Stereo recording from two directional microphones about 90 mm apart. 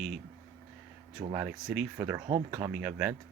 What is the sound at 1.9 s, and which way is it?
Speech, 25° right (ahead or behind).